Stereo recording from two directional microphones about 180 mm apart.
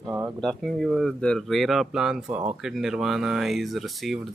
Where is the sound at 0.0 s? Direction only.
15° right (ahead or behind).